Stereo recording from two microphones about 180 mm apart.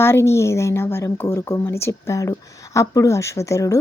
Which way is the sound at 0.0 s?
15° left (ahead or behind).